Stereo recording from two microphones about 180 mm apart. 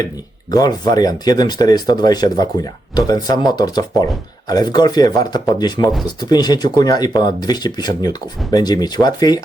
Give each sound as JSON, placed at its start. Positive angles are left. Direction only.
{"t": 0.5, "sound": "speech", "side_deg": 20}